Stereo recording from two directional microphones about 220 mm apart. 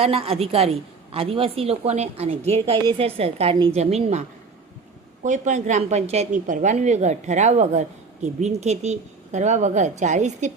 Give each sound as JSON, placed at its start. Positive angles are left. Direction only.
{"t": 0.0, "sound": "a woman's voice", "side_deg": -25}